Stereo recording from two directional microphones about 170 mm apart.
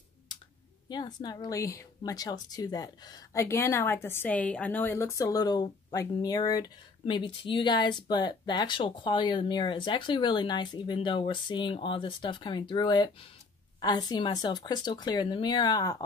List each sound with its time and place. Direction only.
0.8 s speech: 25° left (ahead or behind)